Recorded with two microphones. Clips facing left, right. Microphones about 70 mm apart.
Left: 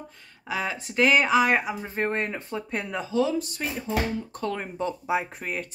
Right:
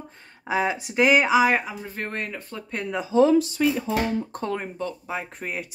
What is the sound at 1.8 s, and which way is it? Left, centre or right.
Speech, left.